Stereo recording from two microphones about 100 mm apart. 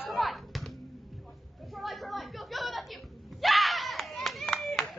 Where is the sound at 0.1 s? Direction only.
Centre (ahead or behind).